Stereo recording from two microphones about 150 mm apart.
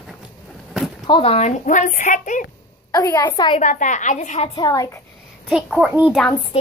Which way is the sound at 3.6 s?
55° left (ahead or behind).